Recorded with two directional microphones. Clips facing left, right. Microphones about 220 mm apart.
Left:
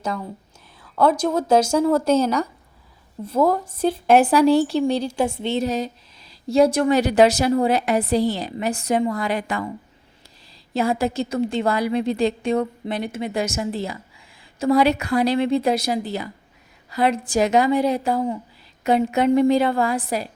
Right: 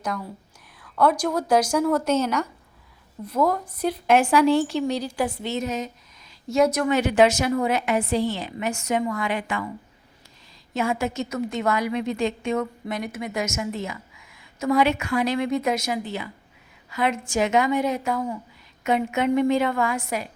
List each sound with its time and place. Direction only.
0.8 s a woman's voice: 25° left (ahead or behind)
10.8 s a woman's voice: 35° left (ahead or behind)